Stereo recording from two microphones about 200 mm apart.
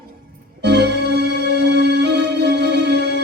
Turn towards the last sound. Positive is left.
turn(degrees=-60)  # may be behind; listen again after turning